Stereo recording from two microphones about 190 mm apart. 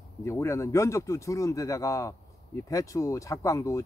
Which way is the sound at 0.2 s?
15° left (ahead or behind).